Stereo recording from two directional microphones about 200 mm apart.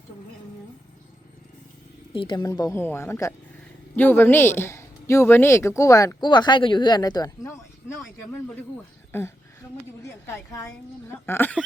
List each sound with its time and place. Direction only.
2.1 s a man's voice: 25° left (ahead or behind)
7.9 s a man's voice: 5° left (ahead or behind)
10.0 s a man's voice: 15° left (ahead or behind)